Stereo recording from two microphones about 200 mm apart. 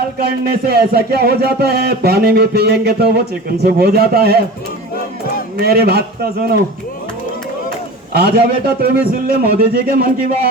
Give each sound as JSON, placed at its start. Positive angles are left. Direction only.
{"t": 0.2, "sound": "music", "side_deg": -50}
{"t": 5.5, "sound": "music", "side_deg": -50}
{"t": 8.1, "sound": "music", "side_deg": -50}